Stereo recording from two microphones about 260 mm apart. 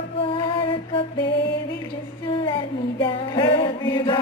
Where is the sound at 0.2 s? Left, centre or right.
Centre.